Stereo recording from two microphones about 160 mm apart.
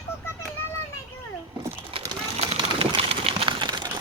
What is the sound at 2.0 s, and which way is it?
Vehicle, 35° right (ahead or behind).